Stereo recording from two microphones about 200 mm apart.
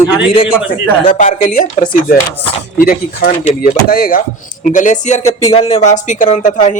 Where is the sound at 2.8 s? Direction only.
45° left (ahead or behind).